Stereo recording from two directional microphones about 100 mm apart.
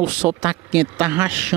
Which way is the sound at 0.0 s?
15° right (ahead or behind).